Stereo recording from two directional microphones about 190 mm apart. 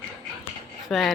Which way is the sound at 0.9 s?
Centre (ahead or behind).